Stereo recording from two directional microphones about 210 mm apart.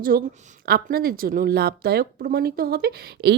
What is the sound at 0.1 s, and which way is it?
A woman's voice, 45° right (ahead or behind).